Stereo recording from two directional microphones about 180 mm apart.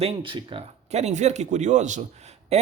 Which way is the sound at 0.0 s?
30° right (ahead or behind).